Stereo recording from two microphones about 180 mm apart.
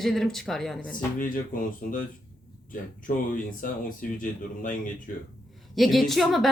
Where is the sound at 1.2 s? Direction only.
50° left (ahead or behind).